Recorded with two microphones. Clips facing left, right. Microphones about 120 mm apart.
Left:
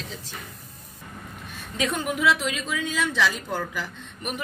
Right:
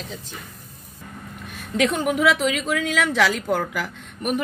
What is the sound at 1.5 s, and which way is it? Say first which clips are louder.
Speech: right 6 dB; 65° right (ahead or behind).